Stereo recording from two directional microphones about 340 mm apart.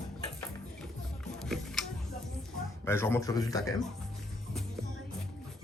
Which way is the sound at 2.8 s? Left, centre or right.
Centre.